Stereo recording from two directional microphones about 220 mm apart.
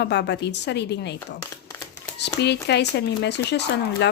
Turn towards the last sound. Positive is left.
turn(degrees=50)  # may be behind; listen again after turning